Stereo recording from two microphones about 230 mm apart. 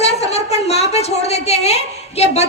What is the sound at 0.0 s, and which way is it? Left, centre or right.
A woman's voice, left.